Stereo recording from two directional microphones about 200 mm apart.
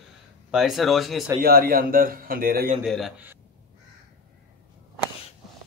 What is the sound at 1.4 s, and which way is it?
A man's voice, 50° right (ahead or behind).